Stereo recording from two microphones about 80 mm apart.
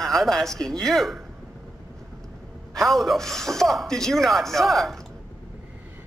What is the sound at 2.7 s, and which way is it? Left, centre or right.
Speech, centre.